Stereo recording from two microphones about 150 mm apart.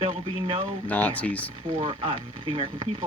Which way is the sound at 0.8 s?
10° left (ahead or behind).